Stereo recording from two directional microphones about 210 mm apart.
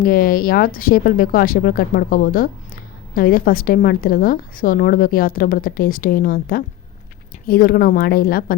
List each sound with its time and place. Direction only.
0.0 s a woman's voice: 45° left (ahead or behind)